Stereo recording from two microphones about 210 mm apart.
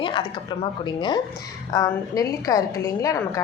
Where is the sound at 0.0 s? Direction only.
25° left (ahead or behind).